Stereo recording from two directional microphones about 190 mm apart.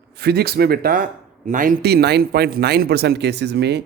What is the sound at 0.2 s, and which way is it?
Speech, 55° right (ahead or behind).